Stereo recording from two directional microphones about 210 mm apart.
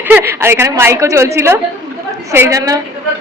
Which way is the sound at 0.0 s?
10° right (ahead or behind).